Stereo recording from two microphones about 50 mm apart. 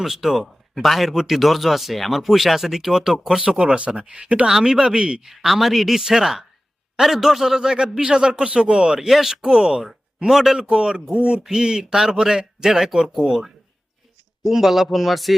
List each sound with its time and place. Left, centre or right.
0.0 s speech: centre; by 4.4 s right
4.4 s a man's voice: centre
5.3 s a man's voice: centre